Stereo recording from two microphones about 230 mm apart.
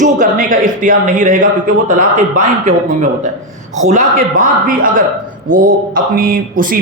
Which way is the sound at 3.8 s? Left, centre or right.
Right.